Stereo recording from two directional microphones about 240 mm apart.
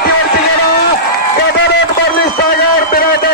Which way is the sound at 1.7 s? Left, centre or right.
Left.